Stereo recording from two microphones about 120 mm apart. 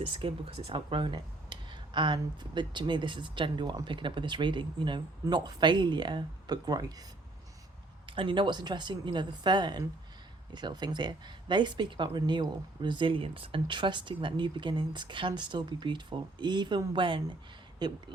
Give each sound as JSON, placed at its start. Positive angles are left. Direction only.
{"t": 0.1, "sound": "speech", "side_deg": -50}
{"t": 8.0, "sound": "speech", "side_deg": -45}